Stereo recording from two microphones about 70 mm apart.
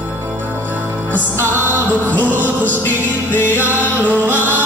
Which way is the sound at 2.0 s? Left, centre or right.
Left.